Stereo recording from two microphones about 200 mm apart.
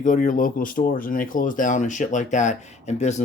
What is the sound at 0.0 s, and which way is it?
Speech, 40° left (ahead or behind).